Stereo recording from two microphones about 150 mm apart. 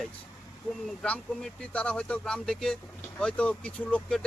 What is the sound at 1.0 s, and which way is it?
Speech, 10° left (ahead or behind).